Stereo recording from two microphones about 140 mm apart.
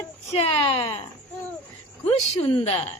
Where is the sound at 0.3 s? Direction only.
45° left (ahead or behind).